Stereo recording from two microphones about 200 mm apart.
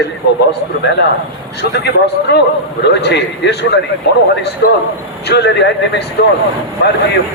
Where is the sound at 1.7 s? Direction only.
55° left (ahead or behind).